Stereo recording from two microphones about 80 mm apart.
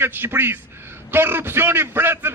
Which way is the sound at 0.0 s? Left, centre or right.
Right.